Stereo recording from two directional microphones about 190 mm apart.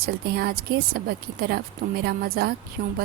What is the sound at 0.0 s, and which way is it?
Speech, 55° right (ahead or behind).